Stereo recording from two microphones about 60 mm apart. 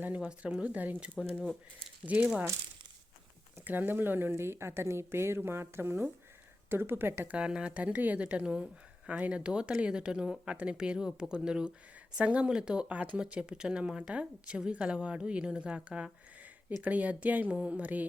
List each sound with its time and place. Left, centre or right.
0.2 s a woman's voice: centre
3.6 s a woman's voice: right
7.3 s a woman's voice: centre